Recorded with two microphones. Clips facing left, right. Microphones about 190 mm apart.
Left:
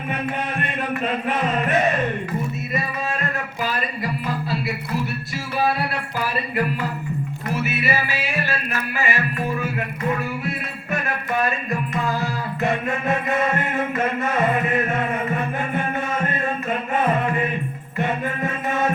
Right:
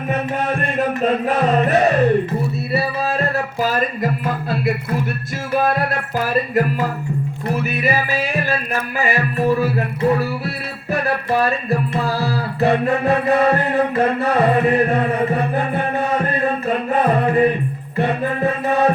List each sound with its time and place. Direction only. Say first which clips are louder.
0.6 s music: right 6 dB; 40° right (ahead or behind)